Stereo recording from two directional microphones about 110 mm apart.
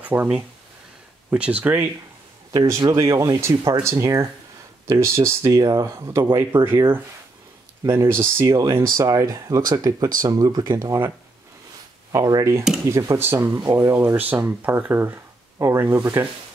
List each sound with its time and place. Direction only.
0.0 s speech: 20° right (ahead or behind)
1.3 s speech: 10° right (ahead or behind)
2.5 s speech: 30° right (ahead or behind)